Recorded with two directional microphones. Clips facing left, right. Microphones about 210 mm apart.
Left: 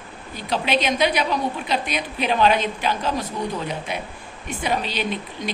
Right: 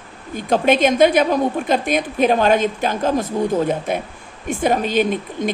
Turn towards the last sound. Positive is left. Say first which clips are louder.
# right 8 dB
turn(degrees=-50)  # may be behind; listen again after turning